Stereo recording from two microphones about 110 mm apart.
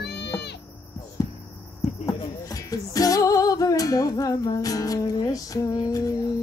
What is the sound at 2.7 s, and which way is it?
Music, 35° left (ahead or behind).